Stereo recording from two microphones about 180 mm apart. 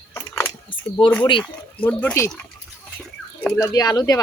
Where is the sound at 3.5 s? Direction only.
20° left (ahead or behind).